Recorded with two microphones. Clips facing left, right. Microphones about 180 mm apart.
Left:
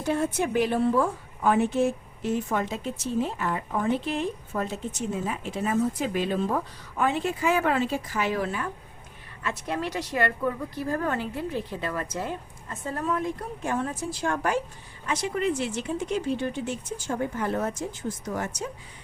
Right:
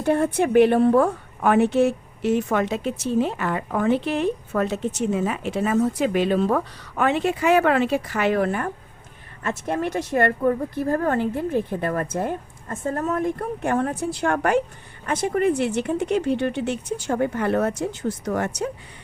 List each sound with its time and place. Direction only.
0.0 s a woman's voice: 60° right (ahead or behind)
15.0 s speech: 50° right (ahead or behind)